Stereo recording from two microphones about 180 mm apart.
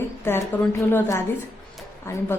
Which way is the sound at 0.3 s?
15° left (ahead or behind).